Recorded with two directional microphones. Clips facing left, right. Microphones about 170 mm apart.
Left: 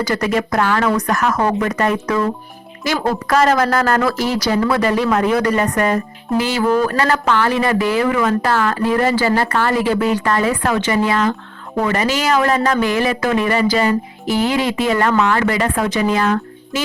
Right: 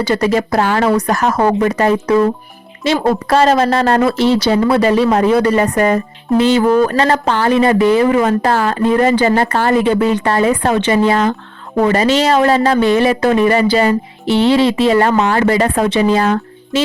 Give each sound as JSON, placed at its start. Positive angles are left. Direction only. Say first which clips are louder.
{"t": 0.0, "sound": "a woman's voice", "louder": "right 4 dB", "side_deg": -30}